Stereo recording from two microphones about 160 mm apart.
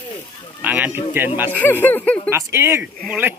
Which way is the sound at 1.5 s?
10° left (ahead or behind).